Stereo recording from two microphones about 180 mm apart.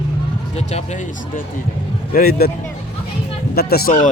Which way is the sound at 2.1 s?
55° left (ahead or behind).